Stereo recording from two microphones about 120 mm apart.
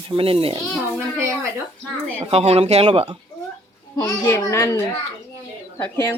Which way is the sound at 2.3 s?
60° right (ahead or behind).